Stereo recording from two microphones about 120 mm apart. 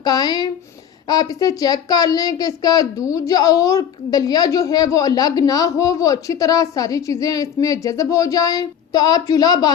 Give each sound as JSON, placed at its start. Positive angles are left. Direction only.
{"t": 0.0, "sound": "speech", "side_deg": 35}